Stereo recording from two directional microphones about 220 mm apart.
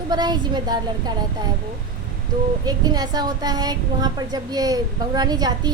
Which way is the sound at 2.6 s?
20° right (ahead or behind).